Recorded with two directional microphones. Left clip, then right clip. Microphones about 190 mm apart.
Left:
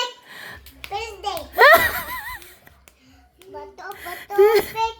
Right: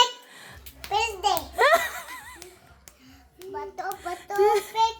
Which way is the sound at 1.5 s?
35° left (ahead or behind).